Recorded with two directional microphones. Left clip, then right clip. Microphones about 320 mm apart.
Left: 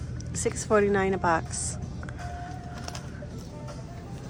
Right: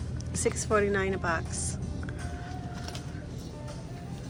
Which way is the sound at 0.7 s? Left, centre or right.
Centre.